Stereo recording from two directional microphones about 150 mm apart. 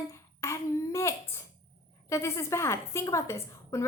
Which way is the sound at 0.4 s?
20° left (ahead or behind).